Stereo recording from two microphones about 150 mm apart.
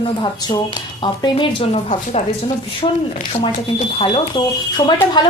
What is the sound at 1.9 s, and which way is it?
A woman's voice, 50° left (ahead or behind).